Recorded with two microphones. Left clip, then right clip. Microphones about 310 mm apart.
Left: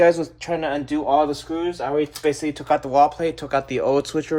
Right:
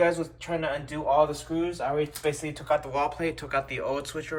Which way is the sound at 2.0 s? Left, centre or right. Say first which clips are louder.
Left 7 dB; left.